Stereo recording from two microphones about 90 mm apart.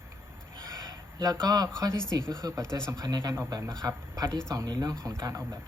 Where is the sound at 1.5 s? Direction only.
45° right (ahead or behind).